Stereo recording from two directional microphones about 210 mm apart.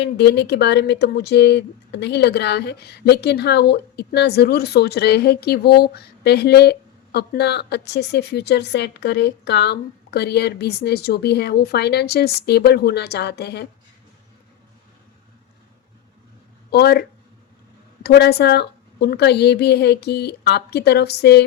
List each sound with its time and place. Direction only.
0.0 s speech: 55° left (ahead or behind)
16.7 s speech: 50° left (ahead or behind)